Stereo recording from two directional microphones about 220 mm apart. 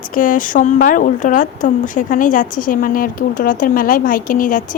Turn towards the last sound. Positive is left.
turn(degrees=35)  # may be behind; listen again after turning